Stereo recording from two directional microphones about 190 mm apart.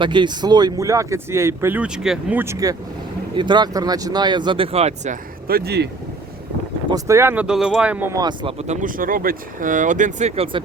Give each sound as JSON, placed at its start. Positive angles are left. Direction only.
{"t": 0.0, "sound": "speech", "side_deg": -25}
{"t": 5.5, "sound": "speech", "side_deg": -55}
{"t": 6.9, "sound": "speech", "side_deg": -15}